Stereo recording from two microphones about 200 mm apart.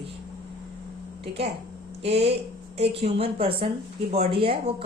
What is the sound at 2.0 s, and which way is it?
A woman's voice, 30° right (ahead or behind).